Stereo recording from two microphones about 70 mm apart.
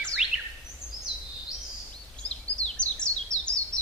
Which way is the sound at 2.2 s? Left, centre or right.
Centre.